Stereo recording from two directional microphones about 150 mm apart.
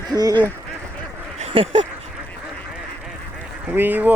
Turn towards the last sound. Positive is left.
turn(degrees=-10)  # may be behind; listen again after turning